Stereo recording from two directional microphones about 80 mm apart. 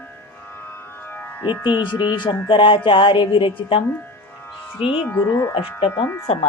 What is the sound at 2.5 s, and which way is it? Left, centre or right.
Music, left.